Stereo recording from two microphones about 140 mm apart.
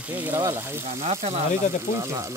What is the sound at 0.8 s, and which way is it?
Speech, 50° right (ahead or behind).